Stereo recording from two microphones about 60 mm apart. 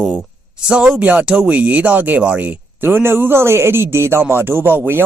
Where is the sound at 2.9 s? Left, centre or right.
Right.